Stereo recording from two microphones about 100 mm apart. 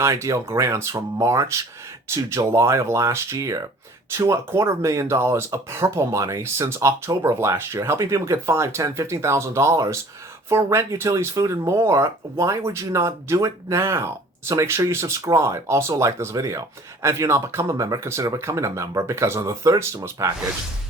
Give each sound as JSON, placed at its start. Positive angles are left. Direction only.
{"t": 0.0, "sound": "speech", "side_deg": -30}